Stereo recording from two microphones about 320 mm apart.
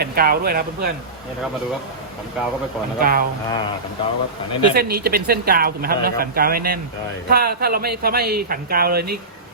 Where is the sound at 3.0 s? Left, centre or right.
Right.